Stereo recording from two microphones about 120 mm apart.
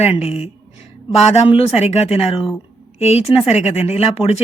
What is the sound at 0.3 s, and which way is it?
Speech, 55° left (ahead or behind).